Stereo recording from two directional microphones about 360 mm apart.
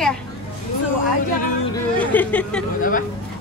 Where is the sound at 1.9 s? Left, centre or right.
Centre.